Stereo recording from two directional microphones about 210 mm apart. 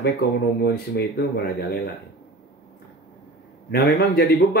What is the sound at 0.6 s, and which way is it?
Speech, 50° left (ahead or behind).